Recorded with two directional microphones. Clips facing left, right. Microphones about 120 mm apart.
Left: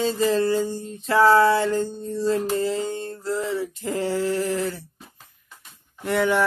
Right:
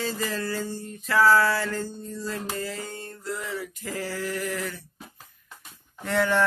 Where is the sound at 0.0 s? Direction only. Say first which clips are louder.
Left 9 dB; 25° left (ahead or behind).